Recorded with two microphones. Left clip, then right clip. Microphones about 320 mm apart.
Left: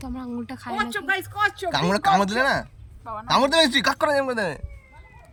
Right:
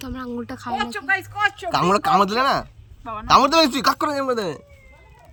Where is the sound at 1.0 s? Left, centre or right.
Left.